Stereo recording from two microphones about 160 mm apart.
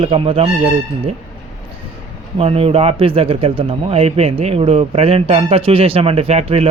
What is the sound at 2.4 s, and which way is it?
A man's voice, 35° right (ahead or behind).